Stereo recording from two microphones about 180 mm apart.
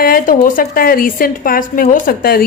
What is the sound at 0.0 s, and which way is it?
A woman's voice, 55° left (ahead or behind).